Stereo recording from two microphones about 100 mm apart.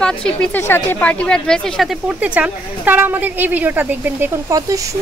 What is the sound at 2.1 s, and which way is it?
A woman's voice, 15° right (ahead or behind).